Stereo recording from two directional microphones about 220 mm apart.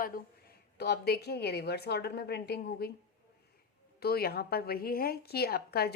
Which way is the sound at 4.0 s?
45° left (ahead or behind).